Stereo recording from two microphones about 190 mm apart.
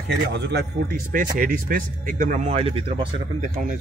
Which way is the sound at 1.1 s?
45° right (ahead or behind).